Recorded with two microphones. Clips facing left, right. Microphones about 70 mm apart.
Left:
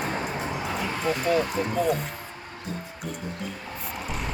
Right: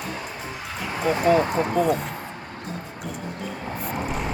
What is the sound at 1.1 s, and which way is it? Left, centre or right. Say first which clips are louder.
Speech: right 5 dB; right.